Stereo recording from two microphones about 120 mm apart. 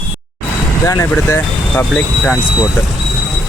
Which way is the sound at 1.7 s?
10° left (ahead or behind).